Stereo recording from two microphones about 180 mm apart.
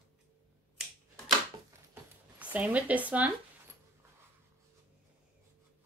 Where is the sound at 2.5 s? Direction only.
10° right (ahead or behind).